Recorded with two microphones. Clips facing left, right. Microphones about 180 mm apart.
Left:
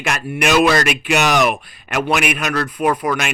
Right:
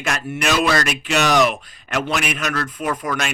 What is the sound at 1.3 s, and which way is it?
Speech, 60° left (ahead or behind).